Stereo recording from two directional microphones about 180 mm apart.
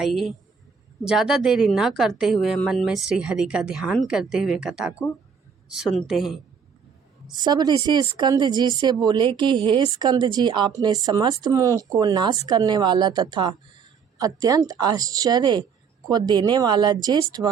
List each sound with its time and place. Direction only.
0.0 s a woman's voice: centre (ahead or behind)
7.3 s speech: 25° right (ahead or behind)